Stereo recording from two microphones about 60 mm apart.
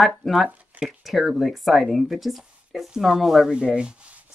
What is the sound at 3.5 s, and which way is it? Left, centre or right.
Speech, centre.